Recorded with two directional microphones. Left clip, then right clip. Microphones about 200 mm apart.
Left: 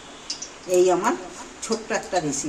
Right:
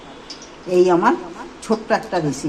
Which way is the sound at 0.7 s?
40° right (ahead or behind).